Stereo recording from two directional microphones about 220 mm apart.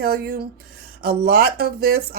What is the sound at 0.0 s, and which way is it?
A woman's voice, 45° right (ahead or behind).